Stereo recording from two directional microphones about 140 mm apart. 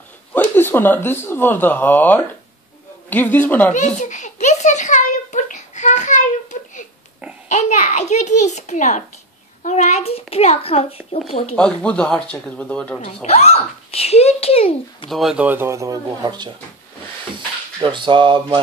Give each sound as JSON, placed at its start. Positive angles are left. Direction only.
{"t": 0.3, "sound": "speech", "side_deg": 15}
{"t": 3.7, "sound": "a sound", "side_deg": 60}
{"t": 7.4, "sound": "a child's voice", "side_deg": 55}
{"t": 11.5, "sound": "speech", "side_deg": 5}
{"t": 13.0, "sound": "a child's voice", "side_deg": 50}
{"t": 15.0, "sound": "speech", "side_deg": 0}
{"t": 17.7, "sound": "speech", "side_deg": -35}